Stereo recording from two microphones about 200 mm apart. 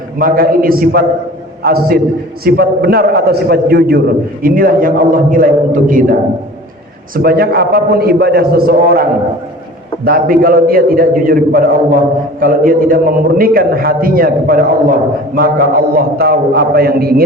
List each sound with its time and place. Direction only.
0.2 s a man's voice: 45° right (ahead or behind)